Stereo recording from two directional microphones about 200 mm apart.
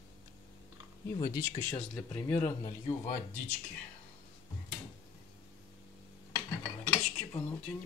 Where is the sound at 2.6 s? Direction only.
30° left (ahead or behind).